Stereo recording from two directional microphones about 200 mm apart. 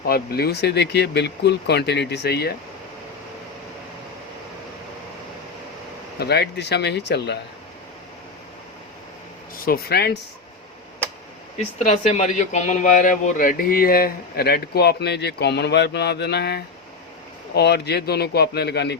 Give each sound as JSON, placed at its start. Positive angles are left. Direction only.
{"t": 0.0, "sound": "speech", "side_deg": 50}
{"t": 6.1, "sound": "speech", "side_deg": 55}
{"t": 9.6, "sound": "speech", "side_deg": 50}
{"t": 11.5, "sound": "speech", "side_deg": 35}